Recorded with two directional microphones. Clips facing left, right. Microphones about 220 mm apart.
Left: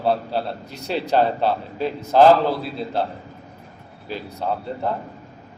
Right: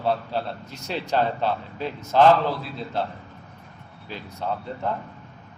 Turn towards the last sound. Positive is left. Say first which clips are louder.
# left 3 dB
turn(degrees=35)  # may be behind; listen again after turning